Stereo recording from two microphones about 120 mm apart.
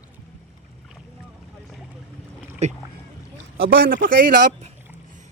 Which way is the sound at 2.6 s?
70° right (ahead or behind).